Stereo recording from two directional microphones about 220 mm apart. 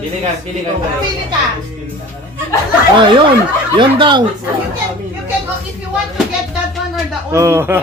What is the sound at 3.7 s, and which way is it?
Speech, 20° right (ahead or behind).